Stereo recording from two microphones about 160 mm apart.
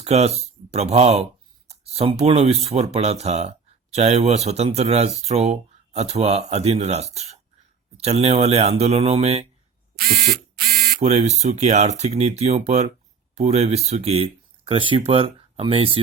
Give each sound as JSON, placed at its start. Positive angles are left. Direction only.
{"t": 0.0, "sound": "speech", "side_deg": -40}
{"t": 10.0, "sound": "a sound", "side_deg": -65}
{"t": 11.0, "sound": "speech", "side_deg": -45}